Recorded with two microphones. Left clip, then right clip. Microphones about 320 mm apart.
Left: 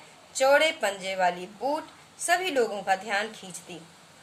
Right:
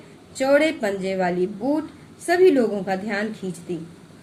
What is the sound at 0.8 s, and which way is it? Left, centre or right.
A woman's voice, left.